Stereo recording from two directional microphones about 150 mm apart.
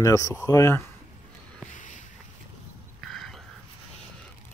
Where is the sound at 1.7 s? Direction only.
55° left (ahead or behind).